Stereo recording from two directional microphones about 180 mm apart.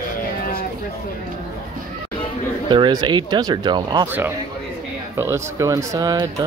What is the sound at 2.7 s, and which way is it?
Speech, 25° right (ahead or behind).